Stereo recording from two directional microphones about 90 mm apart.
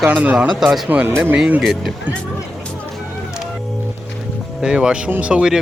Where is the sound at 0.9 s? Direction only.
20° right (ahead or behind).